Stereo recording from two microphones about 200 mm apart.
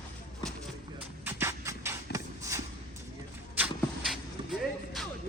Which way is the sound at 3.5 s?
5° right (ahead or behind).